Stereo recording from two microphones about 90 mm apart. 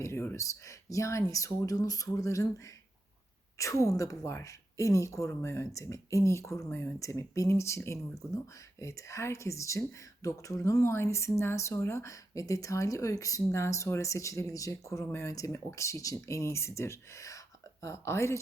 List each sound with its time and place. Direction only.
0.0 s a woman's voice: 25° left (ahead or behind)
6.7 s speech: 20° left (ahead or behind)
7.0 s a woman's voice: 35° left (ahead or behind)